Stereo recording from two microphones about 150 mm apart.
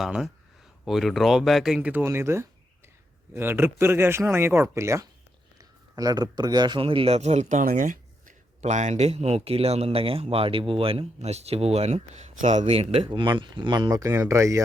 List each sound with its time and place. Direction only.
0.0 s speech: centre (ahead or behind); by 7.9 s 60° right (ahead or behind)
8.6 s speech: 50° right (ahead or behind); by 14.6 s 20° right (ahead or behind)